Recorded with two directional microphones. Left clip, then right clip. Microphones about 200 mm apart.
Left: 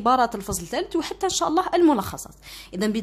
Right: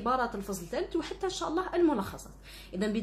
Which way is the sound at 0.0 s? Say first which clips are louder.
Left 10 dB; 40° left (ahead or behind).